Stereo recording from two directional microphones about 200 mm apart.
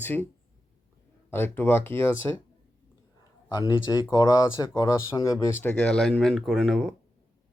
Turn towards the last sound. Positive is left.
turn(degrees=0)  # may be behind; listen again after turning